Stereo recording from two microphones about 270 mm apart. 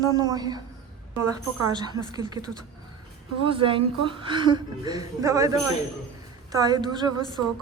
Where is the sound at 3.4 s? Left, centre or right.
Centre.